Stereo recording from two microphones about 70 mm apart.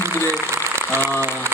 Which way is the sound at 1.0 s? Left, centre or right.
Right.